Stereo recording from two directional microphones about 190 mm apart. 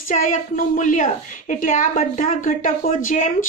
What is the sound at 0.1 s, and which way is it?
A woman's voice, 40° left (ahead or behind).